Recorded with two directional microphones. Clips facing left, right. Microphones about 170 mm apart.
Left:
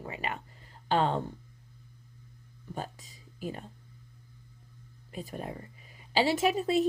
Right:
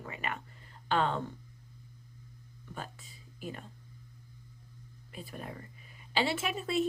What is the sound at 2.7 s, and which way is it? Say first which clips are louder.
Speech: left 5 dB; 40° left (ahead or behind).